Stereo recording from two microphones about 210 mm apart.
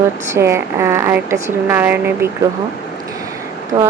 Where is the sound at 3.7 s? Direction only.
15° right (ahead or behind).